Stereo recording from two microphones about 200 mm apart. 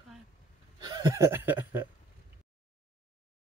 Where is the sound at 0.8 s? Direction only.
20° right (ahead or behind).